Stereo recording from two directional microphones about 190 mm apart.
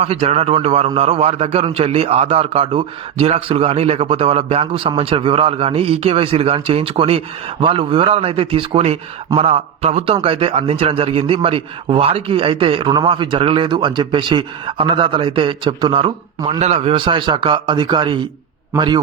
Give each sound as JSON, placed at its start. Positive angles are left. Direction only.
{"t": 0.0, "sound": "a man's voice", "side_deg": -35}